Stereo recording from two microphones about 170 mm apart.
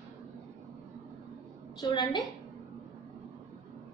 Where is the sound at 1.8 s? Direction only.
25° left (ahead or behind).